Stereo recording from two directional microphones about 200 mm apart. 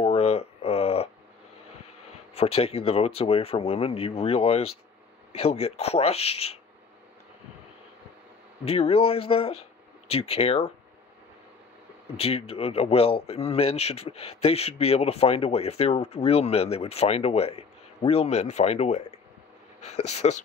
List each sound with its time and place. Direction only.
0.0 s a sound: 30° left (ahead or behind)
2.3 s a man's voice: 30° left (ahead or behind)
8.6 s speech: 30° left (ahead or behind)
12.2 s a man's voice: 30° left (ahead or behind)